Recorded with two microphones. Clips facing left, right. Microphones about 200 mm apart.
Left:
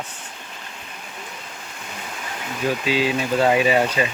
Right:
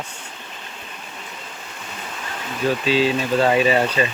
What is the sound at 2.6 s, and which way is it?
Speech, 15° left (ahead or behind).